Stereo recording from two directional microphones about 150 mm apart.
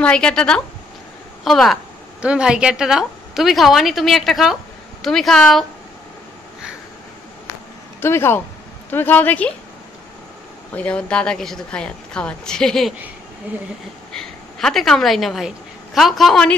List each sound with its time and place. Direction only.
0.0 s a woman's voice: 5° left (ahead or behind)
8.0 s speech: 15° left (ahead or behind)
10.7 s a woman's voice: 10° left (ahead or behind)
14.1 s a woman's voice: 5° left (ahead or behind)